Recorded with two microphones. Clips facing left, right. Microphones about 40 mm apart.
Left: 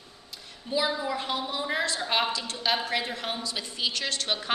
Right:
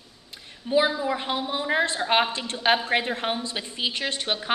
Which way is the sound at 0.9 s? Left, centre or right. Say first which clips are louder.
Right 3 dB; centre.